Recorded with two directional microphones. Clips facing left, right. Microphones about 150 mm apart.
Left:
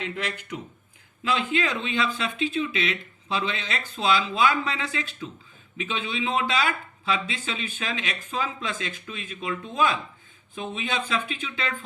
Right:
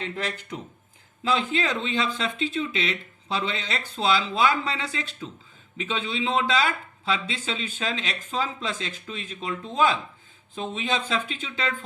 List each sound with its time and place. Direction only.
0.0 s speech: 35° right (ahead or behind)